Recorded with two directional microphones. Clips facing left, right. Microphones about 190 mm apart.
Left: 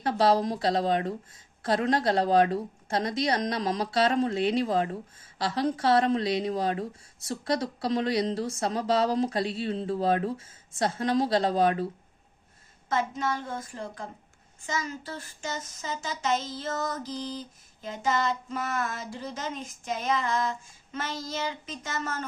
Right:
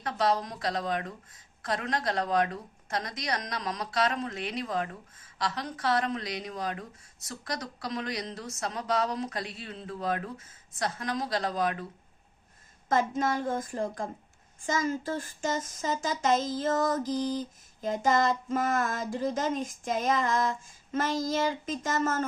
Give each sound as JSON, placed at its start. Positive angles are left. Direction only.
{"t": 0.0, "sound": "a woman's voice", "side_deg": 30}
{"t": 12.9, "sound": "speech", "side_deg": -45}